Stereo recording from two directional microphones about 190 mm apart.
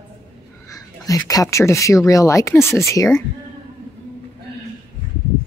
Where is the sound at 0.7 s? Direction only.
20° left (ahead or behind).